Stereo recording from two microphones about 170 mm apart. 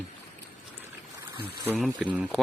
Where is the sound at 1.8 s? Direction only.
5° right (ahead or behind).